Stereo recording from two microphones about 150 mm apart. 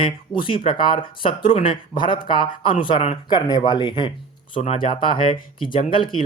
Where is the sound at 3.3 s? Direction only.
25° left (ahead or behind).